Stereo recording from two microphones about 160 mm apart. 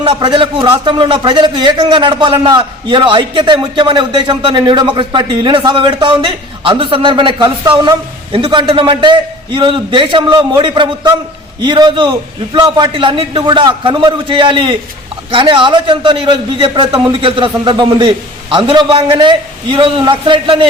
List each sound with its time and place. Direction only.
0.0 s a man's voice: 30° right (ahead or behind)